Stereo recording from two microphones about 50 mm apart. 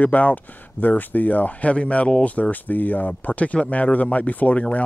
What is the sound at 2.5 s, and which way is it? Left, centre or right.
Speech, left.